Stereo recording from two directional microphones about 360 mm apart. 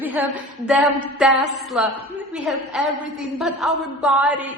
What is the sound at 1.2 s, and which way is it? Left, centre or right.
A man's voice, centre.